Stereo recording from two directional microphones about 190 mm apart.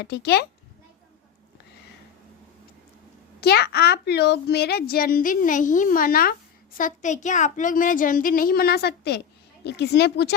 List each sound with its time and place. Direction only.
0.0 s speech: 60° left (ahead or behind)
3.4 s a woman's voice: 55° left (ahead or behind)